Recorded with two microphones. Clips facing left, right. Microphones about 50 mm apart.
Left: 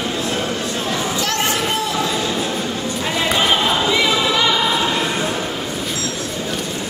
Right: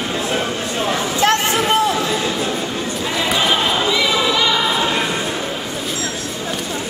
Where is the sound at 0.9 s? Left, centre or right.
Right.